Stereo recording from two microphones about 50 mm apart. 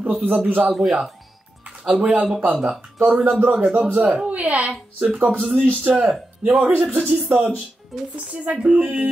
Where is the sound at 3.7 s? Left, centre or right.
Right.